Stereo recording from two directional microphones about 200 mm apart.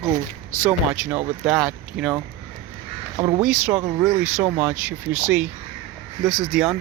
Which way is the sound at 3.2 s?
25° right (ahead or behind).